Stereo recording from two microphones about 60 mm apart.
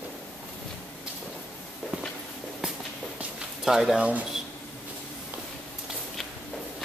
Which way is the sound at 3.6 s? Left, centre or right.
Centre.